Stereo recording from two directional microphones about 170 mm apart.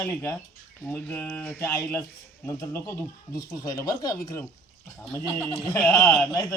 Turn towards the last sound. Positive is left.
turn(degrees=20)  # may be behind; listen again after turning